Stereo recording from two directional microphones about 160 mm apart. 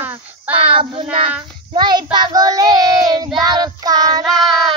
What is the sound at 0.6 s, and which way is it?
Child singing, 35° right (ahead or behind).